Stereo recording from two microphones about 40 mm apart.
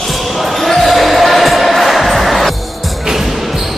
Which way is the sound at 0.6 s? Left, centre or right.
Centre.